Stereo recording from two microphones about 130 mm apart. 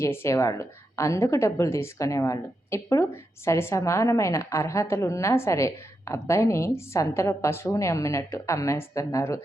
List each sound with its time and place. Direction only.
0.0 s a woman's voice: 20° left (ahead or behind)